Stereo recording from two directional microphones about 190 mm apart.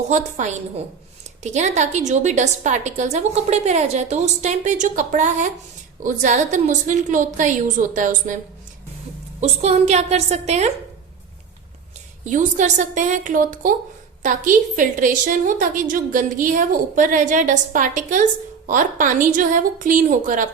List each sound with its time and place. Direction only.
0.1 s a woman's voice: 40° right (ahead or behind)
9.4 s a woman's voice: 35° right (ahead or behind)
12.2 s a woman's voice: 40° right (ahead or behind)